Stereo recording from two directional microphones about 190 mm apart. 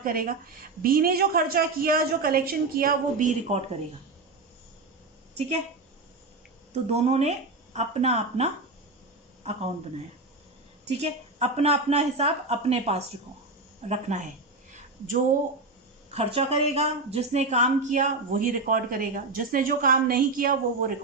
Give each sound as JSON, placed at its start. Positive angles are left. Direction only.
{"t": 0.0, "sound": "a woman's voice", "side_deg": -50}
{"t": 6.7, "sound": "speech", "side_deg": -35}
{"t": 10.8, "sound": "speech", "side_deg": -35}
{"t": 14.7, "sound": "a sound", "side_deg": -45}
{"t": 16.1, "sound": "a woman's voice", "side_deg": -30}